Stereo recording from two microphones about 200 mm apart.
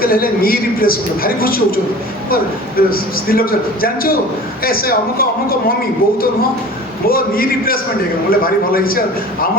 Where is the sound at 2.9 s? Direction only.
45° left (ahead or behind).